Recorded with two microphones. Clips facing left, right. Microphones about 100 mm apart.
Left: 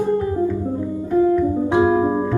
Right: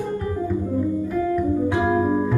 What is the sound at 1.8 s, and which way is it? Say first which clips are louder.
Music: left 7 dB; 25° left (ahead or behind).